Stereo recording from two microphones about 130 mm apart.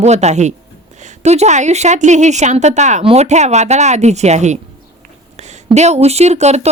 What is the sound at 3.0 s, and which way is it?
Speech, 55° right (ahead or behind).